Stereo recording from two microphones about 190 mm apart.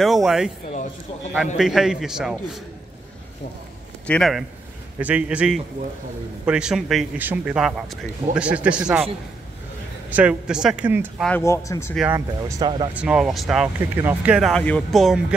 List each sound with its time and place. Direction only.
0.0 s speech: centre (ahead or behind)
1.6 s speech: centre (ahead or behind)
4.1 s speech: centre (ahead or behind)
10.0 s speech: 5° right (ahead or behind)
11.2 s speech: 10° left (ahead or behind)
12.1 s speech: 15° right (ahead or behind)
12.9 s speech: 5° right (ahead or behind)